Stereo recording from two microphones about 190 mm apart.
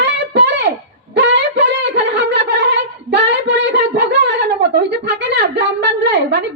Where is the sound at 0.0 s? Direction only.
65° right (ahead or behind).